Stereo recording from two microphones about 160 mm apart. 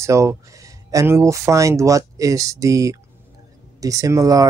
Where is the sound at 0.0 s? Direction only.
20° right (ahead or behind).